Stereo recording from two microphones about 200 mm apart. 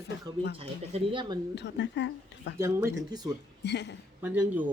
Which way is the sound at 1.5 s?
60° left (ahead or behind).